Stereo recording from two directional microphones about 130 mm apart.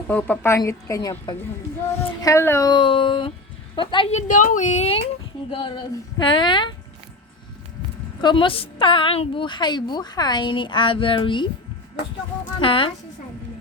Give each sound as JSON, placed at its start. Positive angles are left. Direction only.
{"t": 0.1, "sound": "a woman's voice", "side_deg": 10}
{"t": 0.6, "sound": "speech", "side_deg": 25}
{"t": 2.6, "sound": "a woman's voice", "side_deg": 40}
{"t": 4.1, "sound": "speech", "side_deg": 80}
{"t": 5.5, "sound": "a woman's voice", "side_deg": 40}
{"t": 8.2, "sound": "a woman's voice", "side_deg": 35}
{"t": 12.5, "sound": "a woman's voice", "side_deg": 40}